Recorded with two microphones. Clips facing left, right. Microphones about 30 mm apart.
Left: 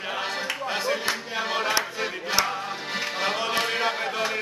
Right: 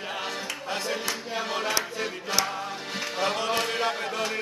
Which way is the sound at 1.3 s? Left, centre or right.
Centre.